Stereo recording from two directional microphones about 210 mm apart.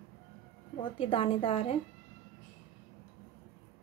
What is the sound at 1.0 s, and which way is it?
Speech, 25° left (ahead or behind).